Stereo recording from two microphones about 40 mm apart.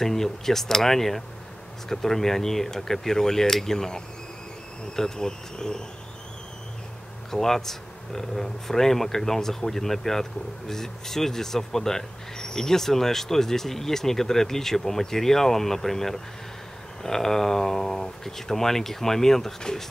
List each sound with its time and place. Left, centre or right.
0.0 s speech: centre
7.2 s speech: centre